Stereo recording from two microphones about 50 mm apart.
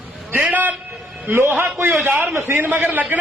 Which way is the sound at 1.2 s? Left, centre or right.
Right.